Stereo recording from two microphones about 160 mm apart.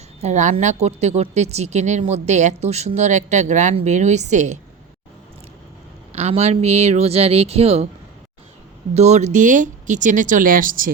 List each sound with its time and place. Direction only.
0.2 s speech: 50° right (ahead or behind)
6.1 s speech: 45° right (ahead or behind)
9.0 s speech: 45° right (ahead or behind)